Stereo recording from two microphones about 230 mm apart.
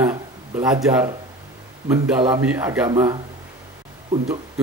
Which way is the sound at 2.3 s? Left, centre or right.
Centre.